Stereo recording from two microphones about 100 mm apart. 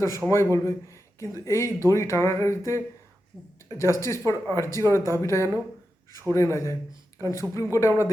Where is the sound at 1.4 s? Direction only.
30° left (ahead or behind).